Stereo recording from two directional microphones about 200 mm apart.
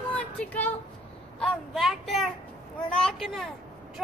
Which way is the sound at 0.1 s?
5° left (ahead or behind).